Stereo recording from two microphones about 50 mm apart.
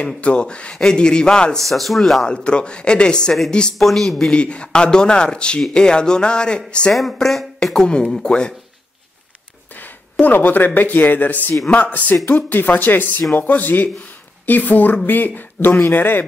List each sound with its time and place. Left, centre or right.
0.0 s speech: left
1.6 s speech: centre
2.2 s speech: centre
3.7 s speech: centre
4.3 s speech: left
6.9 s speech: centre
7.6 s speech: centre
10.2 s a man's voice: left